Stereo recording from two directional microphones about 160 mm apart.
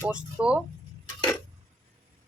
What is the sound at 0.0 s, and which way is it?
Speech, 10° right (ahead or behind).